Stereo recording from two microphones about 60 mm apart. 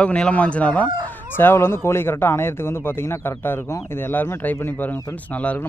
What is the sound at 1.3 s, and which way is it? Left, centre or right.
Speech, left.